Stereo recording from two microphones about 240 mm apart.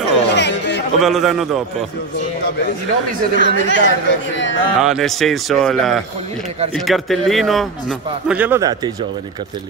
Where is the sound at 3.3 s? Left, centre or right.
Right.